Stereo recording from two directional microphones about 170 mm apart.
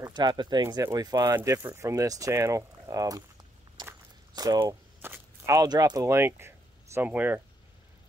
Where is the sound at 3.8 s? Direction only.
20° right (ahead or behind).